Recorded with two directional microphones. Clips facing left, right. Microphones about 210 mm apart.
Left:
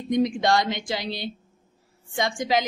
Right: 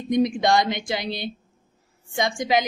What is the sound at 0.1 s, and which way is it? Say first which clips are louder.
Speech: right 2 dB; 15° right (ahead or behind).